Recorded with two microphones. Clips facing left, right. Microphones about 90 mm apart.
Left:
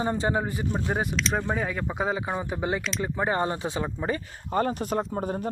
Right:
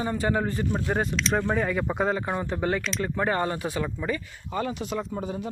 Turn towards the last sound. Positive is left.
turn(degrees=45)  # may be behind; listen again after turning